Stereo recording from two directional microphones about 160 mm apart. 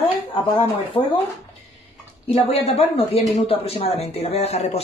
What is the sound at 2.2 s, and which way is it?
Speech, 40° left (ahead or behind).